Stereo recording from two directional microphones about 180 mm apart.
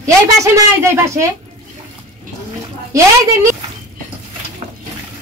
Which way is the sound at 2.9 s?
15° right (ahead or behind).